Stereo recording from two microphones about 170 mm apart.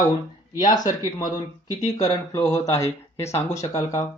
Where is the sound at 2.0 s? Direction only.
20° left (ahead or behind).